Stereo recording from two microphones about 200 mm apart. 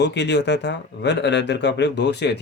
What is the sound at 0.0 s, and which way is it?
Speech, 60° left (ahead or behind).